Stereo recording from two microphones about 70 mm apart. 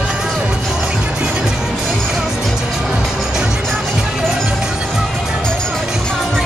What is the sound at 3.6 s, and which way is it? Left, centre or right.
Music, centre.